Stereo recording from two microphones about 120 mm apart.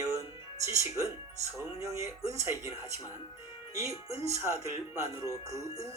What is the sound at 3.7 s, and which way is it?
Speech, 25° right (ahead or behind).